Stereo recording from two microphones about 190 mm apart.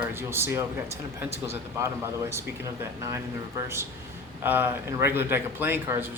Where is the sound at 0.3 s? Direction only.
15° right (ahead or behind).